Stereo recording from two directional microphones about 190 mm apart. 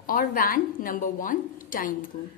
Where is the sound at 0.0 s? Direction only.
45° left (ahead or behind).